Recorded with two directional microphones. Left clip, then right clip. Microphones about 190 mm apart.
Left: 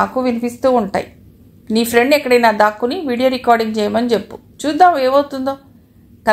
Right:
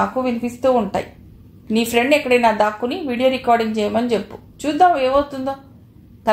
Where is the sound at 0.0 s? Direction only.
30° left (ahead or behind).